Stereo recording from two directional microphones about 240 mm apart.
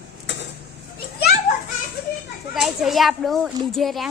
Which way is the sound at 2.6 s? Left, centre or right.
Centre.